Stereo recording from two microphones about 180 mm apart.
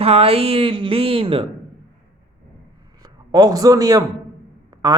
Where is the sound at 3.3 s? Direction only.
20° right (ahead or behind).